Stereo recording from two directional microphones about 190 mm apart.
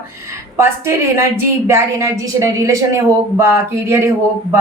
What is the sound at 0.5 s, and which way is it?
A woman's voice, 10° right (ahead or behind).